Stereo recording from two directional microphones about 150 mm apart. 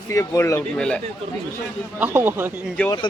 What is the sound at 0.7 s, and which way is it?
Speech, 5° left (ahead or behind).